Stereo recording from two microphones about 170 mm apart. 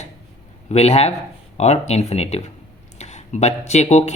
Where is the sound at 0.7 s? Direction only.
40° left (ahead or behind).